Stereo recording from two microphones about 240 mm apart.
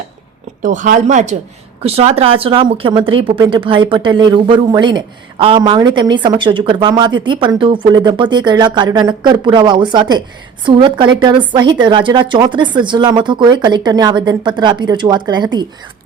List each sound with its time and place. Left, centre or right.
0.6 s speech: right; by 15.6 s centre